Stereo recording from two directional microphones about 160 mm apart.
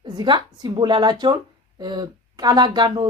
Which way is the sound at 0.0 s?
30° right (ahead or behind).